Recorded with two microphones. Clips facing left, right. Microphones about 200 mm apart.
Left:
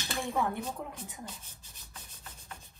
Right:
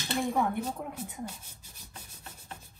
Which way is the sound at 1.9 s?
30° right (ahead or behind).